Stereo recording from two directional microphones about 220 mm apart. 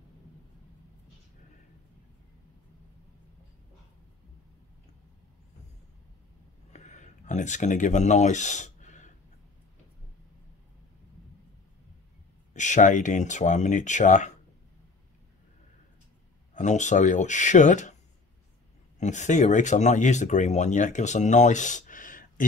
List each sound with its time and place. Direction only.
6.7 s a sound: 35° left (ahead or behind)
12.5 s speech: 35° left (ahead or behind)
16.5 s speech: 35° left (ahead or behind)
18.9 s speech: 35° left (ahead or behind)